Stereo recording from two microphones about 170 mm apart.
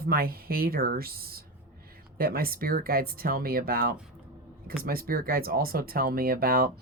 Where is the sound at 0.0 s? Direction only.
60° right (ahead or behind).